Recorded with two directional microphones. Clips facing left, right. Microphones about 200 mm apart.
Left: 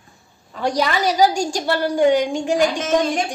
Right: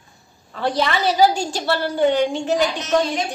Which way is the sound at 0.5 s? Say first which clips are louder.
Left 1 dB; 10° left (ahead or behind).